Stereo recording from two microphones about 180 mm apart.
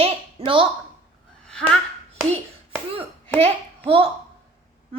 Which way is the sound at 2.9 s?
30° right (ahead or behind).